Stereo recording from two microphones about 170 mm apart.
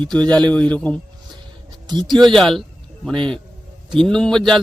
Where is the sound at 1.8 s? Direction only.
25° right (ahead or behind).